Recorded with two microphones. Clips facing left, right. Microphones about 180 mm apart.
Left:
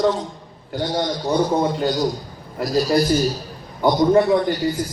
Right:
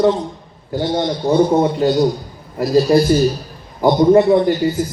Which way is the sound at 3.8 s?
25° right (ahead or behind).